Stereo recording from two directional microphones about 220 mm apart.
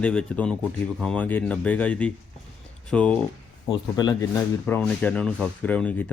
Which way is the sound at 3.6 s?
20° left (ahead or behind).